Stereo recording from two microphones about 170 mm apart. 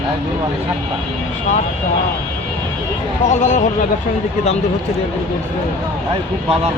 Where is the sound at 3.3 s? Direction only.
45° left (ahead or behind).